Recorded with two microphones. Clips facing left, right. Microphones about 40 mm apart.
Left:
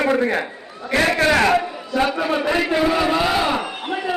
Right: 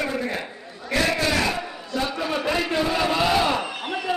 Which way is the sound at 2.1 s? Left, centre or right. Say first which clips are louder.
Left 5 dB; centre.